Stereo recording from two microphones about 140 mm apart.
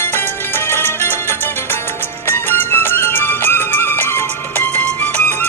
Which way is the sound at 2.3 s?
15° left (ahead or behind).